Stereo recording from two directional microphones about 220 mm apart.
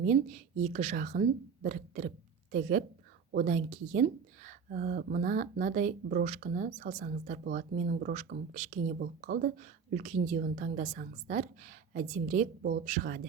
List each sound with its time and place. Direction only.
0.0 s speech: 35° right (ahead or behind)